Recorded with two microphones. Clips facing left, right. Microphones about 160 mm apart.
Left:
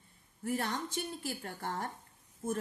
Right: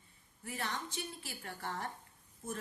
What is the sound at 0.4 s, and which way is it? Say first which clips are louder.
A woman's voice: left 6 dB; 45° left (ahead or behind).